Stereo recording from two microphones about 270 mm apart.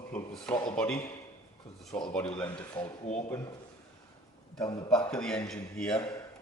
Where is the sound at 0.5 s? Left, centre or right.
Centre.